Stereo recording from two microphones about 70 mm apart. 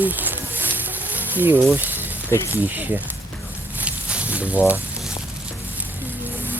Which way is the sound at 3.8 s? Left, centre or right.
Centre.